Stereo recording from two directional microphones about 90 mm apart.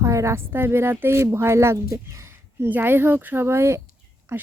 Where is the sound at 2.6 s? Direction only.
20° right (ahead or behind).